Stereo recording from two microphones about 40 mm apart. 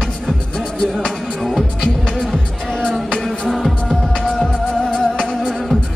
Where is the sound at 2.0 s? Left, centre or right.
Centre.